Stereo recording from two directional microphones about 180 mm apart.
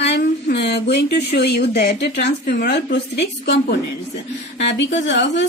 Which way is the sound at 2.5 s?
55° left (ahead or behind).